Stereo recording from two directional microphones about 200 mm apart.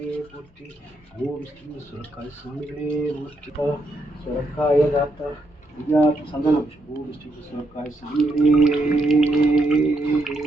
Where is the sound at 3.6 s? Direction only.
25° left (ahead or behind).